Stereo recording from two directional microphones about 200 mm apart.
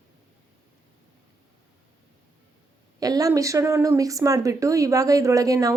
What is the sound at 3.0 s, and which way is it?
Speech, 15° right (ahead or behind).